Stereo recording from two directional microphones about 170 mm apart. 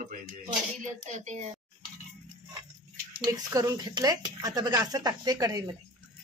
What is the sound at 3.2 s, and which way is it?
Speech, 20° right (ahead or behind).